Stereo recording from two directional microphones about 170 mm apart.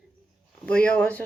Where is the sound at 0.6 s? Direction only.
5° left (ahead or behind).